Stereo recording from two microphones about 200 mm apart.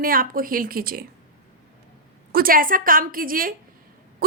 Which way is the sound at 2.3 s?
45° right (ahead or behind).